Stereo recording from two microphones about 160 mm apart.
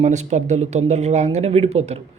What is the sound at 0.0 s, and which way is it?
A man's voice, 45° right (ahead or behind).